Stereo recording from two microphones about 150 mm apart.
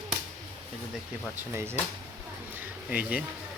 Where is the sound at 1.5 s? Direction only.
15° right (ahead or behind).